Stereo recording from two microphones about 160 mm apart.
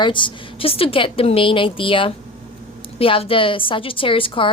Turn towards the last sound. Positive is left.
turn(degrees=35)  # may be behind; listen again after turning